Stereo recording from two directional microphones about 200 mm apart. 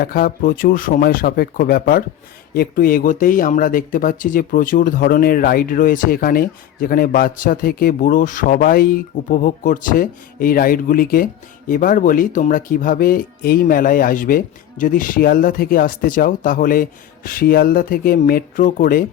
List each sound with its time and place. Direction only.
0.0 s speech: 50° left (ahead or behind)